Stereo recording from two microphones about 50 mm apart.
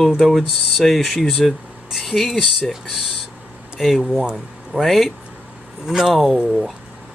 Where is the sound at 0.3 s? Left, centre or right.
Centre.